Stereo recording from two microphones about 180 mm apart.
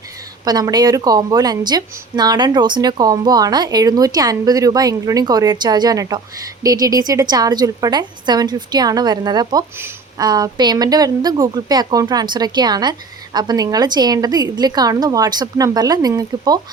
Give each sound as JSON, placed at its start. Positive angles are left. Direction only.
{"t": 0.4, "sound": "a woman's voice", "side_deg": -20}